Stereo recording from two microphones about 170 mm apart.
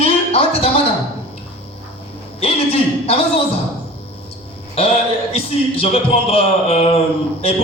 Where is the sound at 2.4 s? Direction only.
35° left (ahead or behind).